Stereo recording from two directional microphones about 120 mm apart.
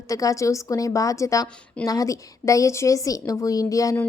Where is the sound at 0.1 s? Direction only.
30° left (ahead or behind).